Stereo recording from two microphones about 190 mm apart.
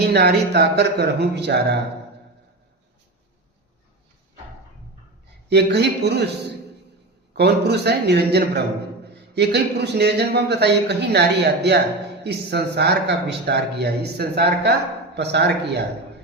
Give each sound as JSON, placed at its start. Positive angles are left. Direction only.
{"t": 0.0, "sound": "a man's voice", "side_deg": -60}
{"t": 5.5, "sound": "a man's voice", "side_deg": -60}
{"t": 7.3, "sound": "a man's voice", "side_deg": -60}